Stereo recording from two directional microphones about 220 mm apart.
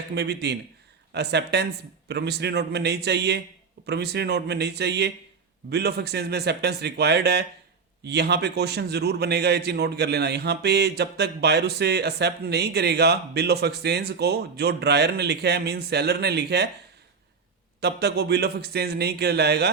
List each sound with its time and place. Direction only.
0.1 s a man's voice: 50° right (ahead or behind)
17.7 s a man's voice: 50° right (ahead or behind)